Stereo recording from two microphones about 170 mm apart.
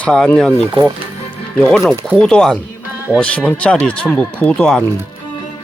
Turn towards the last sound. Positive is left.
turn(degrees=10)  # may be behind; listen again after turning